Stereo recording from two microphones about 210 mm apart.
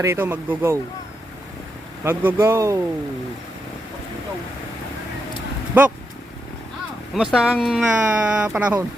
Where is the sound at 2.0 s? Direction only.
10° right (ahead or behind).